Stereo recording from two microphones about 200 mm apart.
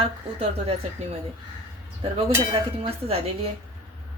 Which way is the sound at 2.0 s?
25° right (ahead or behind).